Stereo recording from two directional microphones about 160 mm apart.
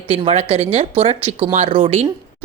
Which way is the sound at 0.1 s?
40° right (ahead or behind).